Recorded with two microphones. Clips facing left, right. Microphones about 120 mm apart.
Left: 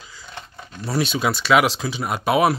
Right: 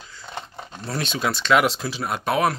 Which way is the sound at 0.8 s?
5° left (ahead or behind).